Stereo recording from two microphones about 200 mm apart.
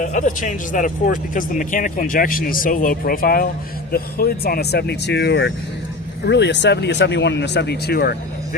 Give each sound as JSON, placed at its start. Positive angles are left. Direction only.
{"t": 0.0, "sound": "speech", "side_deg": 40}